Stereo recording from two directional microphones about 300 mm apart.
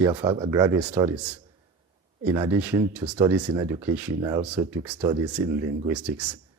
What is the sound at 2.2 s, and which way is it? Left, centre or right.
Speech, centre.